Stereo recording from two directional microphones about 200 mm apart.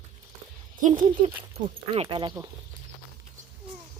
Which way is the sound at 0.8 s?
40° right (ahead or behind).